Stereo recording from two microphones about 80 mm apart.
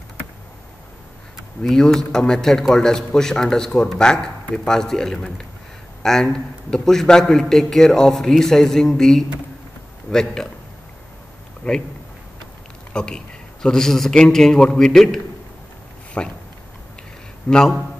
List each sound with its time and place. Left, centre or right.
1.6 s a man's voice: centre
11.6 s speech: centre
12.9 s speech: centre
16.2 s speech: centre
17.5 s speech: centre